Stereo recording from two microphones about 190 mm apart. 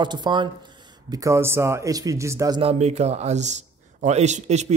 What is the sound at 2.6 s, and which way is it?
A man's voice, 35° right (ahead or behind).